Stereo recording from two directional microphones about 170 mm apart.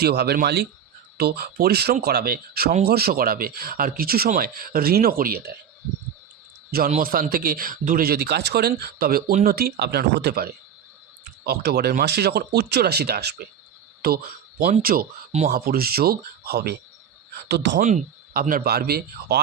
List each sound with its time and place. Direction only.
0.0 s speech: 70° right (ahead or behind)
6.7 s a man's voice: 60° right (ahead or behind)
14.6 s speech: 55° right (ahead or behind)
17.5 s speech: 90° right
17.7 s speech: 50° right (ahead or behind); by 19.4 s 65° right (ahead or behind)